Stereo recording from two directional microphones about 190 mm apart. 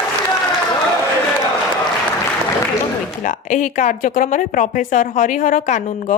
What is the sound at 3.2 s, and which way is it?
A woman's voice, 40° left (ahead or behind).